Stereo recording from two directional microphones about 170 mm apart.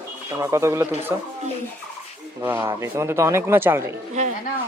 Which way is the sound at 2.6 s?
15° right (ahead or behind).